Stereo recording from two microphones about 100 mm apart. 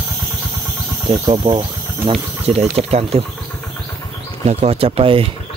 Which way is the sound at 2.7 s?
90° right.